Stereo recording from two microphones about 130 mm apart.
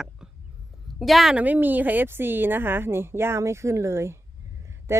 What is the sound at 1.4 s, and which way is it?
A woman's voice, 15° right (ahead or behind).